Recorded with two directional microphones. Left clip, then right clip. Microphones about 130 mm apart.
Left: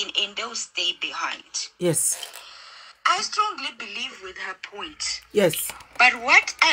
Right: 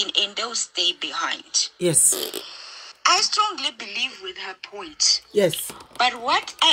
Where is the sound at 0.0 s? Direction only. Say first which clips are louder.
Right 3 dB; 60° right (ahead or behind).